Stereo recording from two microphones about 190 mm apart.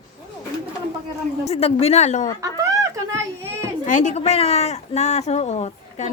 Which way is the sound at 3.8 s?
40° left (ahead or behind).